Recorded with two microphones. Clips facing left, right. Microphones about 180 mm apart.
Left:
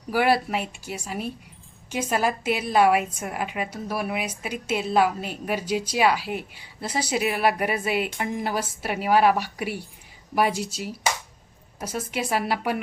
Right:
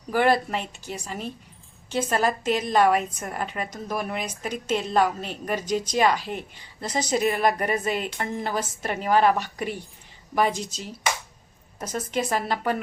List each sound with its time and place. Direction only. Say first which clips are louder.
0.1 s a woman's voice: even; 10° left (ahead or behind)